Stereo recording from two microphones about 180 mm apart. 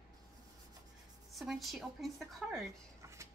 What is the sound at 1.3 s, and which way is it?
Speech, centre (ahead or behind).